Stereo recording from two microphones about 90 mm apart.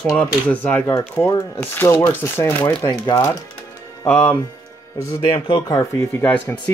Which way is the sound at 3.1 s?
35° left (ahead or behind).